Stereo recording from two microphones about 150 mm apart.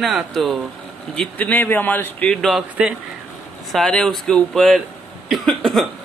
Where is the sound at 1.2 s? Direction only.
10° left (ahead or behind).